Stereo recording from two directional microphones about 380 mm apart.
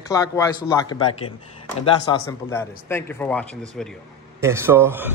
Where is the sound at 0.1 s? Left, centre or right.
Centre.